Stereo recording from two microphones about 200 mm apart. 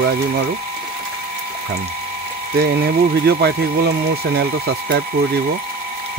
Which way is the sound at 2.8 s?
55° right (ahead or behind).